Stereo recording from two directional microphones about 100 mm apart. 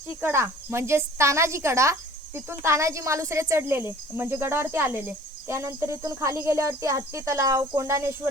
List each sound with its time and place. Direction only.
0.2 s cricket: 25° right (ahead or behind)